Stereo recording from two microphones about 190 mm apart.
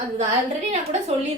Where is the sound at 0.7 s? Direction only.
35° right (ahead or behind).